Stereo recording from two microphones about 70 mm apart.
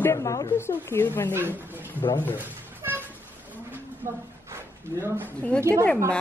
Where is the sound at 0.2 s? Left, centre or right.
Left.